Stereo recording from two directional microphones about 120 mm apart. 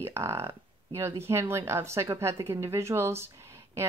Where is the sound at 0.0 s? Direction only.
20° right (ahead or behind).